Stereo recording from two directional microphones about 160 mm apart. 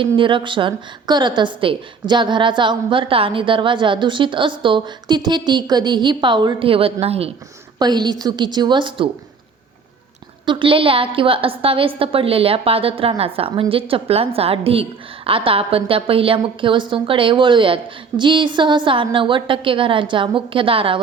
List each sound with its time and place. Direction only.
0.2 s a woman's voice: 30° right (ahead or behind)
7.8 s a woman's voice: 25° right (ahead or behind)
10.4 s a woman's voice: 30° right (ahead or behind)